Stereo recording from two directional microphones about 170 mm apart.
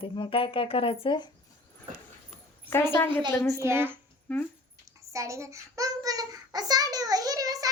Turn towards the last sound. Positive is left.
turn(degrees=-20)  # may be behind; listen again after turning